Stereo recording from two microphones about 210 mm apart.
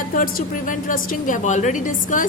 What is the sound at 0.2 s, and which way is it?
A woman's voice, 40° left (ahead or behind).